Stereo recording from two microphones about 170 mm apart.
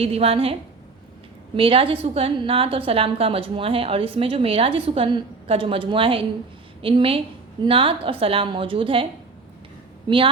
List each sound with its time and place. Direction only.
0.0 s a woman's voice: 35° right (ahead or behind)
1.5 s a woman's voice: 30° right (ahead or behind)